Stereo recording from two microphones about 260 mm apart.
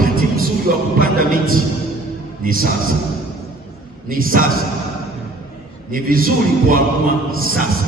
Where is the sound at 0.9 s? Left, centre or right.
Right.